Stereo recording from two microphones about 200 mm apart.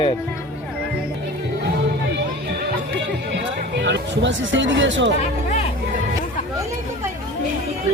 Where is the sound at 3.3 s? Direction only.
55° right (ahead or behind).